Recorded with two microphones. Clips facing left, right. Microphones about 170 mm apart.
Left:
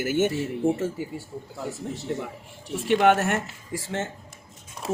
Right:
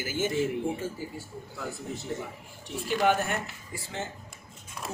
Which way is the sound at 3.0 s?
75° left (ahead or behind).